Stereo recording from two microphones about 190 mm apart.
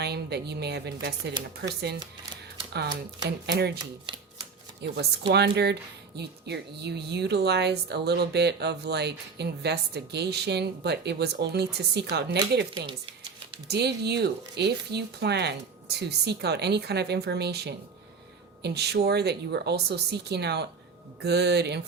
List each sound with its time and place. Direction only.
0.0 s a woman's voice: 60° right (ahead or behind)
3.2 s a woman's voice: 60° right (ahead or behind)
5.3 s a woman's voice: 60° right (ahead or behind)